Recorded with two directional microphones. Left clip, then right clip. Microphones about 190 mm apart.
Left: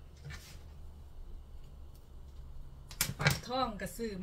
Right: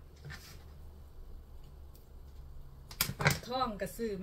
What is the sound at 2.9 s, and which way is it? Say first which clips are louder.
Typewriter: right 1 dB; 10° right (ahead or behind).